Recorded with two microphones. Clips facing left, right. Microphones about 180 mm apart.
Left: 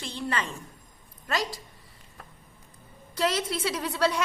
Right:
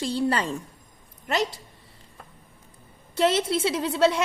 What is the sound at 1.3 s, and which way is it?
Speech, 25° right (ahead or behind).